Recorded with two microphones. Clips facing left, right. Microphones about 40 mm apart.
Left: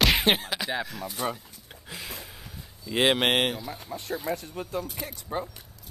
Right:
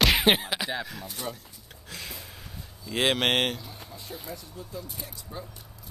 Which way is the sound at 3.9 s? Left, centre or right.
Left.